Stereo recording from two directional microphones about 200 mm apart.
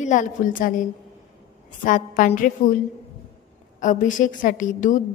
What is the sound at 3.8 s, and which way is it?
A woman's voice, 40° left (ahead or behind).